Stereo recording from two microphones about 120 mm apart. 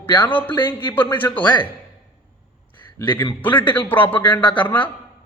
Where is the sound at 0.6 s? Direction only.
15° left (ahead or behind).